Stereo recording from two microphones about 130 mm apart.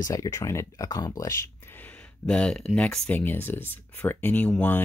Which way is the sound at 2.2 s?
5° left (ahead or behind).